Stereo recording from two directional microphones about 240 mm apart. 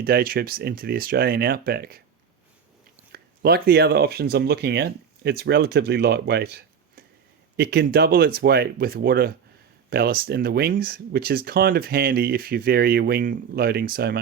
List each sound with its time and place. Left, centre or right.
0.0 s speech: right
3.1 s speech: right